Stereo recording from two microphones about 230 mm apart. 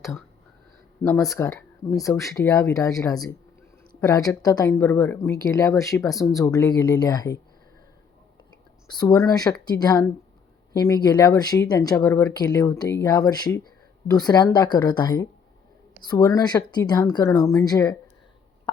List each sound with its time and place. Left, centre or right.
1.0 s speech: centre
8.9 s speech: centre